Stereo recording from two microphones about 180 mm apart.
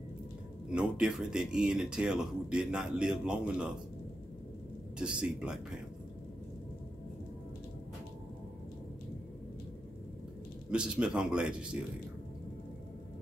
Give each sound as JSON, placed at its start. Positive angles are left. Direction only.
{"t": 0.7, "sound": "speech", "side_deg": -5}
{"t": 4.9, "sound": "speech", "side_deg": -5}
{"t": 10.7, "sound": "speech", "side_deg": -5}